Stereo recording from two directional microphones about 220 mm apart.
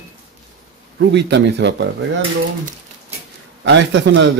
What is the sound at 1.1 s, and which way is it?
Speech, 50° right (ahead or behind).